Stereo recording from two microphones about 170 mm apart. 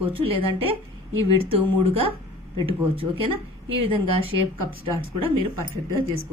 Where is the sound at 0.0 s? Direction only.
30° right (ahead or behind).